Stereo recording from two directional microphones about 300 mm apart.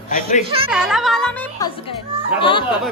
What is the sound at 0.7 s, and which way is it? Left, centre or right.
Speech, centre.